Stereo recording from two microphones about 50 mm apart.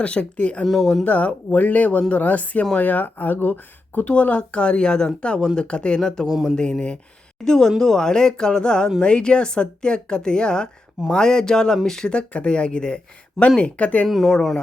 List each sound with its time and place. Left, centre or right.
0.0 s speech: left
0.6 s speech: centre
1.0 s speech: left
6.3 s a sound: centre
6.6 s speech: centre
14.1 s speech: centre